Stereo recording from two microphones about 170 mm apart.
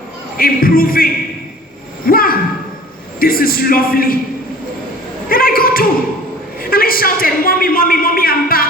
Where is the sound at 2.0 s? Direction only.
60° left (ahead or behind).